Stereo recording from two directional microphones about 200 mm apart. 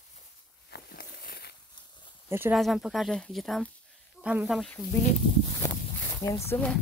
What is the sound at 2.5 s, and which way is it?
Speech, centre (ahead or behind).